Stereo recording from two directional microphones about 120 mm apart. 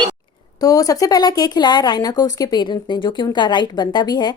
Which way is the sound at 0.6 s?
30° left (ahead or behind).